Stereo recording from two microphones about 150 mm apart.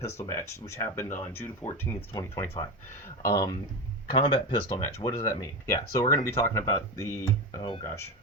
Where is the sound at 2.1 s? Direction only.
25° left (ahead or behind).